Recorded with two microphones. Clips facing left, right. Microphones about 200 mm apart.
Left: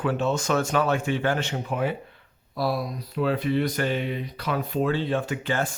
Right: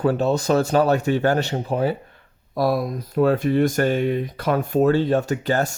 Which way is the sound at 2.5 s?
50° right (ahead or behind).